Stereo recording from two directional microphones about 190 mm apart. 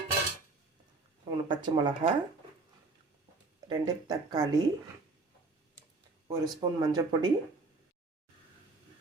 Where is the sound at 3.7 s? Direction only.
20° right (ahead or behind).